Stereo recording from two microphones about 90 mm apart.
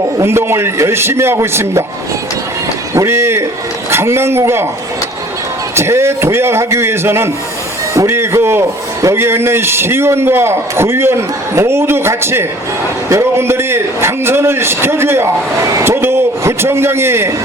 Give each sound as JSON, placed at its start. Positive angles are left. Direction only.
{"t": 0.2, "sound": "a man's voice", "side_deg": -30}
{"t": 2.9, "sound": "a man's voice", "side_deg": -30}
{"t": 5.7, "sound": "a man's voice", "side_deg": -30}